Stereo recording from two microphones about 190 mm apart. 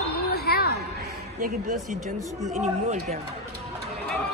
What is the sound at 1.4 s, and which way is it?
Speech, 40° right (ahead or behind).